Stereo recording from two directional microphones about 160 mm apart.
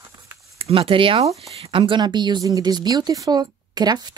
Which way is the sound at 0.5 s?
35° right (ahead or behind).